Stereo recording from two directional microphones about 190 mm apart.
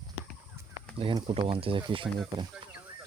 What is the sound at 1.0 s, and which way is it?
Speech, 25° right (ahead or behind).